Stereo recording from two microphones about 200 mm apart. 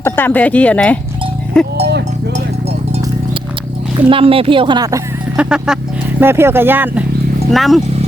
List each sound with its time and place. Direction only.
0.0 s speech: 10° left (ahead or behind)
3.9 s speech: 25° right (ahead or behind)
5.4 s speech: 5° right (ahead or behind)